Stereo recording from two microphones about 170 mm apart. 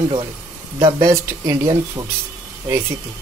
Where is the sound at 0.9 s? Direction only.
20° right (ahead or behind).